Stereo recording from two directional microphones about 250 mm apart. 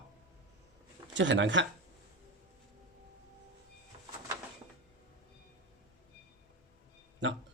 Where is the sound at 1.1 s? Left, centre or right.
Right.